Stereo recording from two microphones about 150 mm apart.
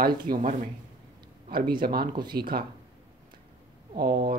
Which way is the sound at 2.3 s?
90° right.